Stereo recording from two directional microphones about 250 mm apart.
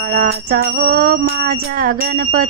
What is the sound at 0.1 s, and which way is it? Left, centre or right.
Speech, right.